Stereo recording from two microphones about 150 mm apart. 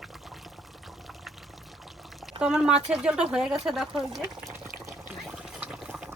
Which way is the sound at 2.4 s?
5° right (ahead or behind).